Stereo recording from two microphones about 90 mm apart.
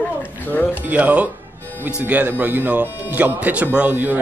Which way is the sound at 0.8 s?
15° right (ahead or behind).